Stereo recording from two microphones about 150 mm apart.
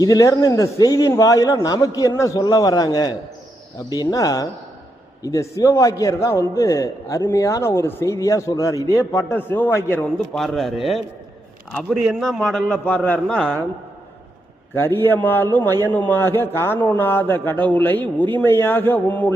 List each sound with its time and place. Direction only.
0.0 s a man's voice: 25° left (ahead or behind)
10.2 s a man's voice: centre (ahead or behind)
14.8 s speech: 15° left (ahead or behind)